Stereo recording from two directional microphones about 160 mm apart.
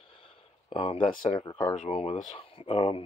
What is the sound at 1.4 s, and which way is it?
Speech, 15° left (ahead or behind).